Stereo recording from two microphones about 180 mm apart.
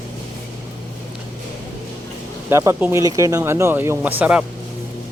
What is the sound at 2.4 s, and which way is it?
Speech, 15° right (ahead or behind).